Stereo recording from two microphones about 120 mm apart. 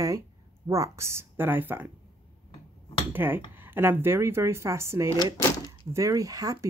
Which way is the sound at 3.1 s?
15° right (ahead or behind).